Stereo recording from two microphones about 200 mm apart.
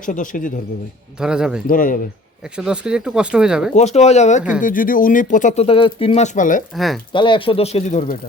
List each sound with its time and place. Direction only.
0.0 s speech: 40° left (ahead or behind)
1.2 s speech: 5° right (ahead or behind)
1.6 s speech: 45° left (ahead or behind)
2.4 s speech: 5° right (ahead or behind)
3.8 s speech: 35° left (ahead or behind)
6.7 s speech: centre (ahead or behind)
7.1 s speech: 25° left (ahead or behind); by 8.2 s 40° left (ahead or behind)